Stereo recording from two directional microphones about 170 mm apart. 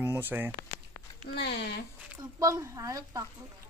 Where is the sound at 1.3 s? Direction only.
75° left (ahead or behind).